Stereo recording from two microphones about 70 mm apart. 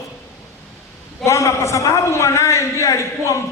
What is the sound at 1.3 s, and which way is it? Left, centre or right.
A man's voice, left.